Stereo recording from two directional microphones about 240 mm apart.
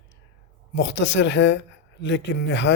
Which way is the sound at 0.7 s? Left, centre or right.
Left.